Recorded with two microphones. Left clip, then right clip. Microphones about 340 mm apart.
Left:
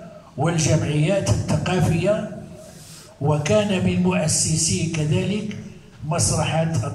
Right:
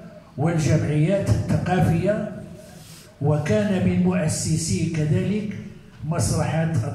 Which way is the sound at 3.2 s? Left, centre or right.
Left.